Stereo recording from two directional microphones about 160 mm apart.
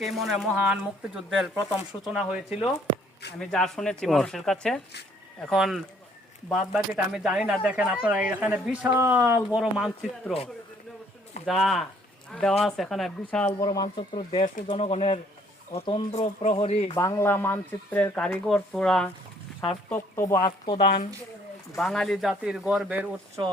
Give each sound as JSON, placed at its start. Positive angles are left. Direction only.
{"t": 0.0, "sound": "speech", "side_deg": 0}
{"t": 9.6, "sound": "speech", "side_deg": 0}
{"t": 11.4, "sound": "speech", "side_deg": 0}
{"t": 13.6, "sound": "speech", "side_deg": 25}
{"t": 16.9, "sound": "speech", "side_deg": 20}
{"t": 19.9, "sound": "speech", "side_deg": 20}
{"t": 21.8, "sound": "speech", "side_deg": 0}
{"t": 23.4, "sound": "speech", "side_deg": -25}